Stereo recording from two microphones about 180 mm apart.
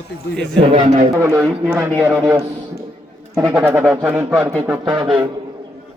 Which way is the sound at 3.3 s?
5° right (ahead or behind).